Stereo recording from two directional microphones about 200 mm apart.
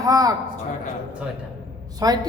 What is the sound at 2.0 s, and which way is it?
Speech, 20° right (ahead or behind).